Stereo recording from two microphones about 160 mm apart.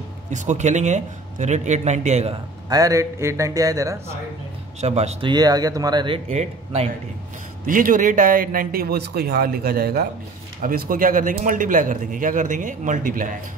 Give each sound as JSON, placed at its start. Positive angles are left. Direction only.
{"t": 0.3, "sound": "a man's voice", "side_deg": -50}
{"t": 2.7, "sound": "speech", "side_deg": -20}
{"t": 4.7, "sound": "a man's voice", "side_deg": -45}
{"t": 5.3, "sound": "speech", "side_deg": -25}
{"t": 7.6, "sound": "speech", "side_deg": -60}